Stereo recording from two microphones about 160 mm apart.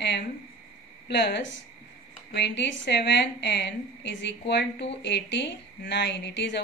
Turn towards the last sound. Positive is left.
turn(degrees=90)